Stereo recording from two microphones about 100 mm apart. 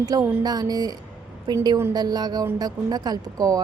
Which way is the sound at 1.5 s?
50° right (ahead or behind).